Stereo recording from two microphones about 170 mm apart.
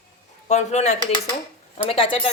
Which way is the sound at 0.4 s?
40° left (ahead or behind).